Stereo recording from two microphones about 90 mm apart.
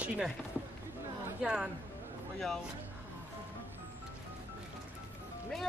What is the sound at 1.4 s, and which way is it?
Speech, 10° right (ahead or behind).